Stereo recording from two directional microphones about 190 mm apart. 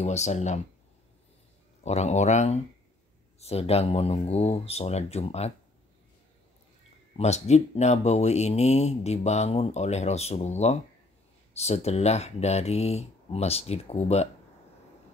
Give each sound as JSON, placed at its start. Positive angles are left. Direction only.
{"t": 0.0, "sound": "speech", "side_deg": 35}
{"t": 1.8, "sound": "speech", "side_deg": 35}
{"t": 7.2, "sound": "speech", "side_deg": 35}